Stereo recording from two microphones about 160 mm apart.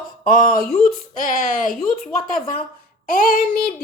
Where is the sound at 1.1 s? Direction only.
55° left (ahead or behind).